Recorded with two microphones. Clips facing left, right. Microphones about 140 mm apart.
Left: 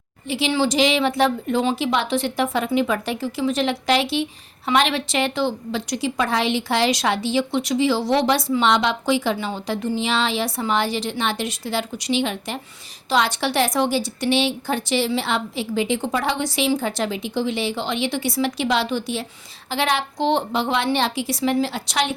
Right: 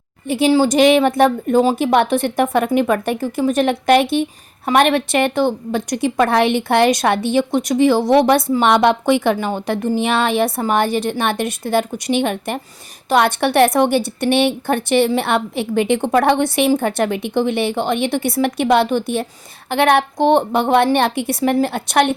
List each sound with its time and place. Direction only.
0.3 s a woman's voice: 50° right (ahead or behind)